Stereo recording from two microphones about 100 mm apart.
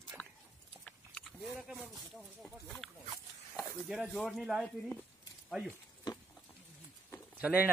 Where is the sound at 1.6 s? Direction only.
5° right (ahead or behind).